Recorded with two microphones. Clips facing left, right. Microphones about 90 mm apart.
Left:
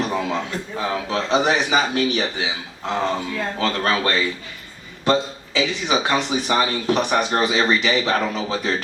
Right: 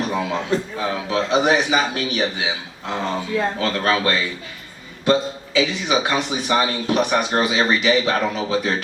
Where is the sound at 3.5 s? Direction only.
35° left (ahead or behind).